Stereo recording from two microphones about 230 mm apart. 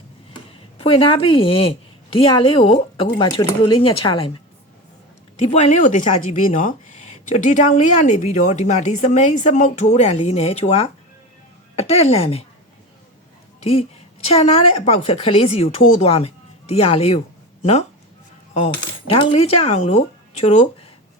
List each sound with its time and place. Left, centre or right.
0.8 s a woman's voice: left
5.5 s a woman's voice: left
14.3 s a woman's voice: left